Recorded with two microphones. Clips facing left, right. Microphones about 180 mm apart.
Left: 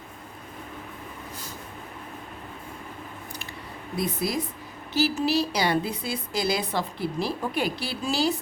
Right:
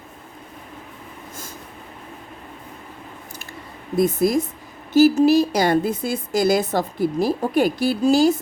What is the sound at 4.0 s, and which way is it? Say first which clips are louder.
A woman's voice: right 10 dB; 45° right (ahead or behind).